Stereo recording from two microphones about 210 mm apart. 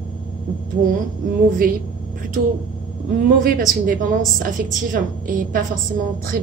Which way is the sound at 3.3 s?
45° right (ahead or behind).